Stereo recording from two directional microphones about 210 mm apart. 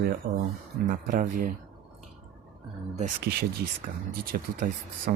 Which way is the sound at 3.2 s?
50° right (ahead or behind).